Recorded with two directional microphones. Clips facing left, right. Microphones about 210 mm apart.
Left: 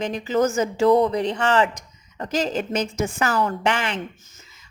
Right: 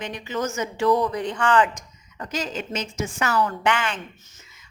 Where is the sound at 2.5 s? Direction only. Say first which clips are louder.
Left 6 dB; 50° left (ahead or behind).